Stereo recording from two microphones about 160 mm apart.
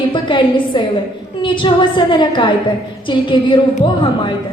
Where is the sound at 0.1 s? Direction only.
30° left (ahead or behind).